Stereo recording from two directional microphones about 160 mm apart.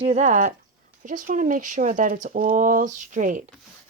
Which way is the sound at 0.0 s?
45° right (ahead or behind).